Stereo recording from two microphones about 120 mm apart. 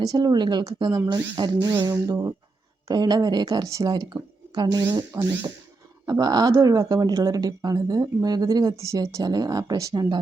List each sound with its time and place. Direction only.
0.0 s speech: 30° right (ahead or behind)